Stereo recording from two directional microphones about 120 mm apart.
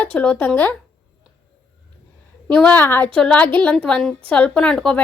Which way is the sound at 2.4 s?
15° left (ahead or behind).